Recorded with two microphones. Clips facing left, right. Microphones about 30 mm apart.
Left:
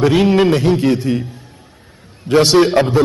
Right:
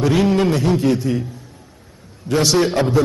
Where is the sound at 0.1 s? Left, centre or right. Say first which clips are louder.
Left 4 dB; left.